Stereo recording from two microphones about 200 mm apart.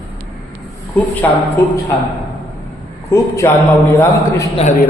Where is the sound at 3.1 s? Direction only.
15° left (ahead or behind).